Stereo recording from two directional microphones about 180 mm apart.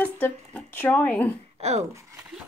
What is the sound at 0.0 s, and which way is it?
Speech, 10° left (ahead or behind).